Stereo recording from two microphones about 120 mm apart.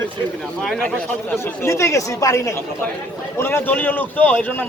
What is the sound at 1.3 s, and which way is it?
A man's voice, 25° left (ahead or behind).